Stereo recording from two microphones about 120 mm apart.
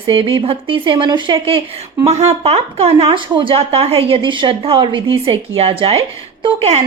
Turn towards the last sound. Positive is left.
turn(degrees=-60)  # may be behind; listen again after turning